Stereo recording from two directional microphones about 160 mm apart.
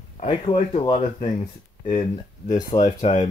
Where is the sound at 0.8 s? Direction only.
40° left (ahead or behind).